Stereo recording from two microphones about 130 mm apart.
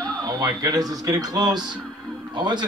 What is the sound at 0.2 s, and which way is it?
A man's voice, 30° right (ahead or behind).